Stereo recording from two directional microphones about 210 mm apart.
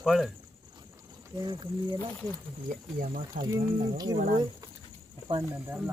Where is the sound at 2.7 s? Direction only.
40° right (ahead or behind).